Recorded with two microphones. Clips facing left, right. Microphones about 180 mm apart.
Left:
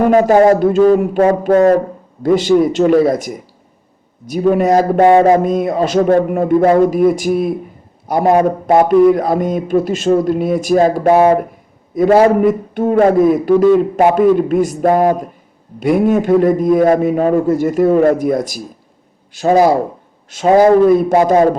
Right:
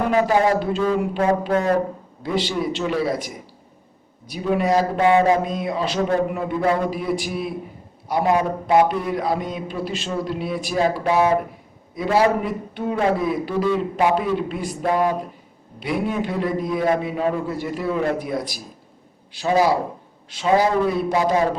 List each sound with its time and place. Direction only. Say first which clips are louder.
0.0 s a man's voice: left 9 dB; 45° left (ahead or behind)